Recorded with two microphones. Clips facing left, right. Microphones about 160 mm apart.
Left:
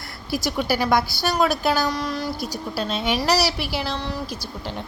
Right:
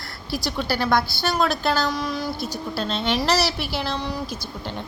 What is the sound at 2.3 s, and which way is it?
Speech, 40° left (ahead or behind).